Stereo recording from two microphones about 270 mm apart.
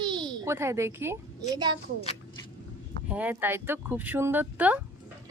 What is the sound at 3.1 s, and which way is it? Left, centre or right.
A child's voice, centre.